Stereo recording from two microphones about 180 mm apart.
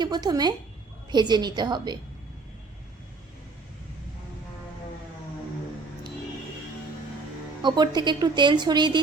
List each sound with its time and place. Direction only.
0.0 s a woman's voice: 20° right (ahead or behind)
7.6 s a woman's voice: 25° right (ahead or behind)